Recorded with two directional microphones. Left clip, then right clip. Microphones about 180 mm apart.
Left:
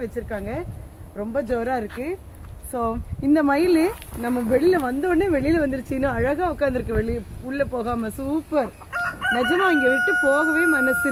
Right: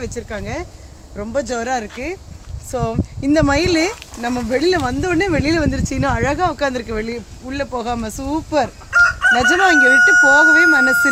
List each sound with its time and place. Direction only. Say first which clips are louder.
0.0 s speech: right 2 dB; 60° right (ahead or behind)
2.7 s speech: right 4 dB; 45° right (ahead or behind)